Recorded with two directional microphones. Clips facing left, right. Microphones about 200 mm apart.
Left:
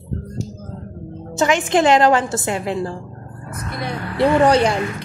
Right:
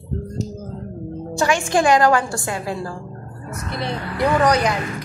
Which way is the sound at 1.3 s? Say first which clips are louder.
Left 2 dB; 20° left (ahead or behind).